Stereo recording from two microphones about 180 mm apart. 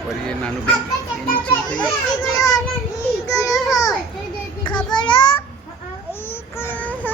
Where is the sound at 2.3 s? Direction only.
20° left (ahead or behind).